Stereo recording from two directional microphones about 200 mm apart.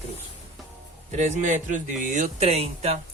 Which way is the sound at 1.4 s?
40° right (ahead or behind).